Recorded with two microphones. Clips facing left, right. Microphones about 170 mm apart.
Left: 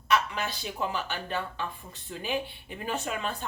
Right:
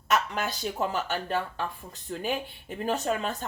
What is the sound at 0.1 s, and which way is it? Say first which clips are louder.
Speech: even; 45° right (ahead or behind).